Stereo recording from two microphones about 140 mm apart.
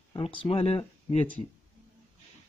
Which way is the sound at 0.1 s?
40° left (ahead or behind).